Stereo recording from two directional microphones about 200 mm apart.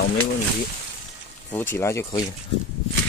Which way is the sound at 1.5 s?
10° left (ahead or behind).